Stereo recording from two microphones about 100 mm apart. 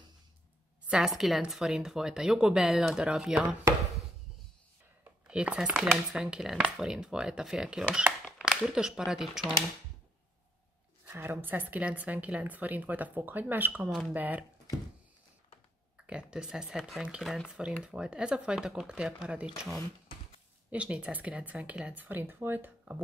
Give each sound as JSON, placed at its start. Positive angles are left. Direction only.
{"t": 0.8, "sound": "speech", "side_deg": -5}
{"t": 5.3, "sound": "speech", "side_deg": -10}
{"t": 11.1, "sound": "speech", "side_deg": -20}
{"t": 13.8, "sound": "speech", "side_deg": -5}
{"t": 14.1, "sound": "speech", "side_deg": -15}
{"t": 16.1, "sound": "speech", "side_deg": -10}
{"t": 20.7, "sound": "speech", "side_deg": -10}